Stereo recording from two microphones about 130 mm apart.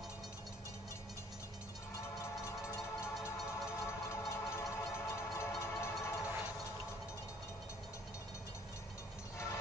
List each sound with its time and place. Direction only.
2.0 s train: 20° left (ahead or behind)